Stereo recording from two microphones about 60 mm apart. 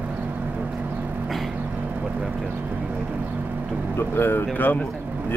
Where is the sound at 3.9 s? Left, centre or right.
Left.